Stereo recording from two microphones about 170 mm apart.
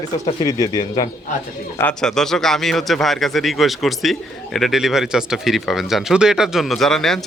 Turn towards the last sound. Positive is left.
turn(degrees=0)  # may be behind; listen again after turning